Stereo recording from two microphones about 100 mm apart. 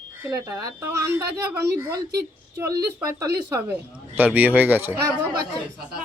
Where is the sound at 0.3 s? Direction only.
30° right (ahead or behind).